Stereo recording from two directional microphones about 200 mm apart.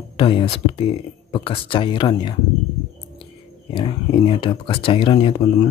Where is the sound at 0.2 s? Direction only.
25° left (ahead or behind).